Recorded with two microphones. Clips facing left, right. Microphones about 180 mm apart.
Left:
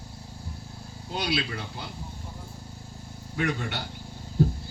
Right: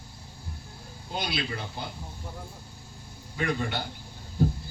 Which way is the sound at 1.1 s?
75° left (ahead or behind).